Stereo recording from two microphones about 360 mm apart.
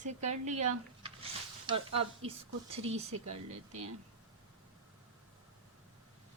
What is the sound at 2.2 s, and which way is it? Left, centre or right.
Speech, centre.